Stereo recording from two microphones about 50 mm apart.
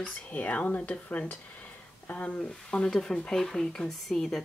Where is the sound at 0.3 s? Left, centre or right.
Left.